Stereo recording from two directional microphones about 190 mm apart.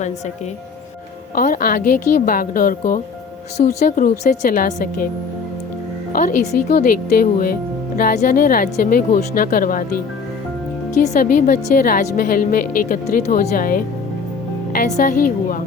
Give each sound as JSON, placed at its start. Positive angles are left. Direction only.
{"t": 1.4, "sound": "a woman's voice", "side_deg": 50}
{"t": 6.1, "sound": "a woman's voice", "side_deg": 45}
{"t": 11.0, "sound": "a woman's voice", "side_deg": 40}